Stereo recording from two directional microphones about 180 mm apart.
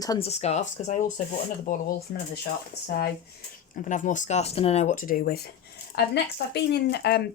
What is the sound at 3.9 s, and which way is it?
Speech, 45° left (ahead or behind).